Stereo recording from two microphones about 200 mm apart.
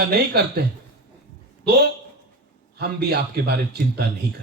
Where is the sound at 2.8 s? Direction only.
55° right (ahead or behind).